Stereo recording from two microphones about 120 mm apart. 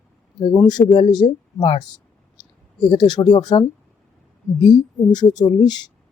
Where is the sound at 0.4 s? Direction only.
35° left (ahead or behind).